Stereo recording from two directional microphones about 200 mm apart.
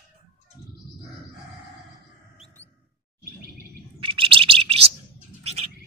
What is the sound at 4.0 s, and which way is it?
Bird, 25° right (ahead or behind).